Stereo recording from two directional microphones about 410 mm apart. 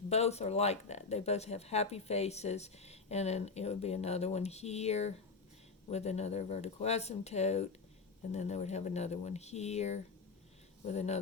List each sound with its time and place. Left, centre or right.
0.1 s speech: centre